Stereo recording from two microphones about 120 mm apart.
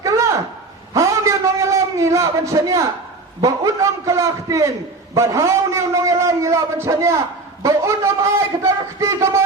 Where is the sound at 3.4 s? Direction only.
25° right (ahead or behind).